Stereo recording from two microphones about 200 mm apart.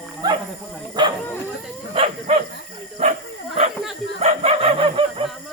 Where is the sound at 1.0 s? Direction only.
20° right (ahead or behind).